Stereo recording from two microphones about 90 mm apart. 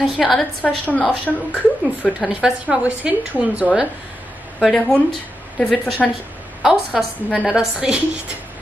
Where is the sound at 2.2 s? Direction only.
10° right (ahead or behind).